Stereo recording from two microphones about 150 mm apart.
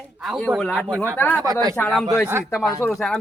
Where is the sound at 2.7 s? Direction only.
20° left (ahead or behind).